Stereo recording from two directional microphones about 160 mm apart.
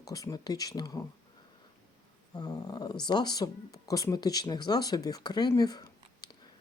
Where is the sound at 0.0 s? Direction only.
20° left (ahead or behind).